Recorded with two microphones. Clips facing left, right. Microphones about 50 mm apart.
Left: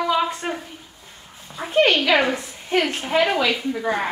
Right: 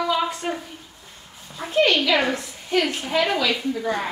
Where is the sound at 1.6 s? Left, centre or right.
Centre.